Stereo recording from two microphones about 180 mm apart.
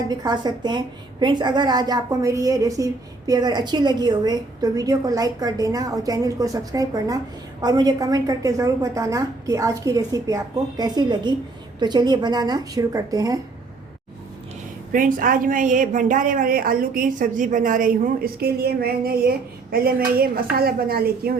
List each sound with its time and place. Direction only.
0.1 s a woman's voice: 25° right (ahead or behind)
14.9 s a woman's voice: 50° right (ahead or behind)